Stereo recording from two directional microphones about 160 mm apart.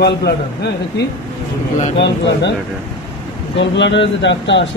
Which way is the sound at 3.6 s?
90° left.